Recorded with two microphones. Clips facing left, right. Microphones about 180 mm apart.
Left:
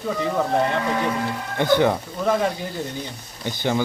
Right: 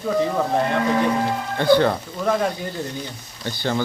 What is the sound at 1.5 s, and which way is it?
Speech, 15° left (ahead or behind).